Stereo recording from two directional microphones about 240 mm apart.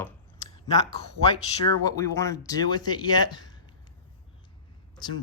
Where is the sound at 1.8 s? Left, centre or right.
Centre.